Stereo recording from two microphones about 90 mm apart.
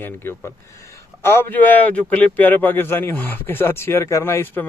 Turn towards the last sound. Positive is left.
turn(degrees=25)  # may be behind; listen again after turning